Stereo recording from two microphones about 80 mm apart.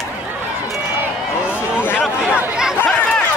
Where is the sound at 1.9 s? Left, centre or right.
Centre.